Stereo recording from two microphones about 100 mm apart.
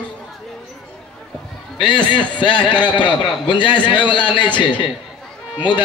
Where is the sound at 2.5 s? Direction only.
50° left (ahead or behind).